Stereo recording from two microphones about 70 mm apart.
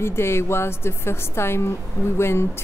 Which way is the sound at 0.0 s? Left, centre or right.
Left.